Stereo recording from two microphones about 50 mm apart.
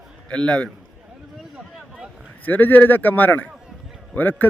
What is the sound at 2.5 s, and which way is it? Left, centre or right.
Speech, left.